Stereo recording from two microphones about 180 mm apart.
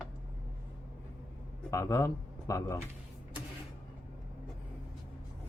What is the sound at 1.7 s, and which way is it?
Speech, 15° left (ahead or behind).